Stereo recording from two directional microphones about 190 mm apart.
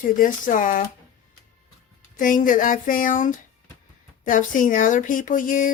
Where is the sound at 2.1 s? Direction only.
45° left (ahead or behind).